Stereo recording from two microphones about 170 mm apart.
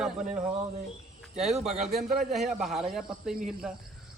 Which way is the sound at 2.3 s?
Centre (ahead or behind).